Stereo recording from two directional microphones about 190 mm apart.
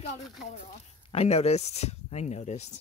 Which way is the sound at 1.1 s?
35° left (ahead or behind).